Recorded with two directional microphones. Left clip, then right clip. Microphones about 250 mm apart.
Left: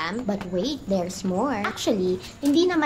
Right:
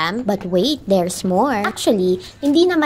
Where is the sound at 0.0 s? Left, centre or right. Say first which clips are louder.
Right 8 dB; right.